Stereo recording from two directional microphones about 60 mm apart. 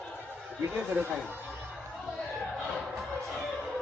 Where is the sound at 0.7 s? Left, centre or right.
Right.